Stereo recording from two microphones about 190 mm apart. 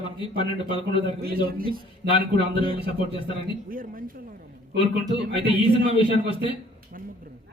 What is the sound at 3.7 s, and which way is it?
Speech, 45° right (ahead or behind).